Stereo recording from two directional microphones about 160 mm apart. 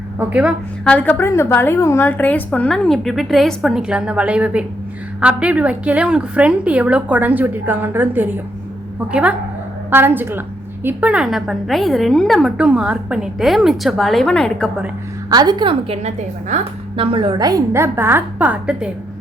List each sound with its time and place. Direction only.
0.2 s a woman's voice: 10° right (ahead or behind)
0.9 s a woman's voice: 10° left (ahead or behind); by 8.3 s 10° right (ahead or behind)
9.9 s a woman's voice: 15° right (ahead or behind); by 14.7 s 5° left (ahead or behind)
15.3 s a woman's voice: 25° right (ahead or behind); by 18.9 s 5° right (ahead or behind)